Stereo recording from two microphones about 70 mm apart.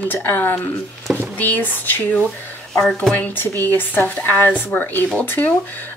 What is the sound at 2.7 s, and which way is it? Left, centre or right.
Speech, centre.